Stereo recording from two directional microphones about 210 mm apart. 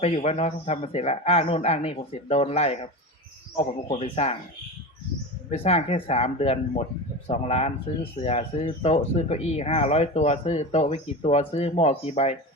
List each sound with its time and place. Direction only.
0.0 s a man's voice: 30° left (ahead or behind)
5.5 s speech: 30° left (ahead or behind)